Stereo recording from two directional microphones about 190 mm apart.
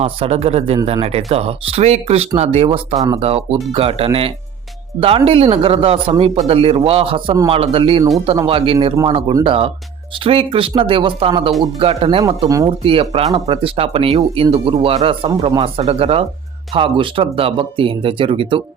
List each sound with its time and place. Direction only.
0.0 s speech: 35° right (ahead or behind)
12.5 s speech: 15° right (ahead or behind)
12.8 s speech: 30° right (ahead or behind)